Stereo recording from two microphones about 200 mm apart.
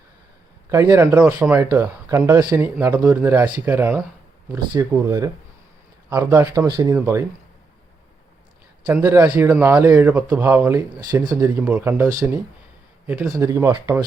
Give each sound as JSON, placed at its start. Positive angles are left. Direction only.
{"t": 0.7, "sound": "speech", "side_deg": -15}
{"t": 8.9, "sound": "speech", "side_deg": -10}
{"t": 11.5, "sound": "speech", "side_deg": -10}
{"t": 13.1, "sound": "speech", "side_deg": -10}